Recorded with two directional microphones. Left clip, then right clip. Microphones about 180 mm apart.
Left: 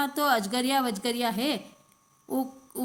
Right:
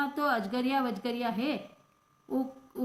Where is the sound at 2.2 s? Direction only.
45° left (ahead or behind).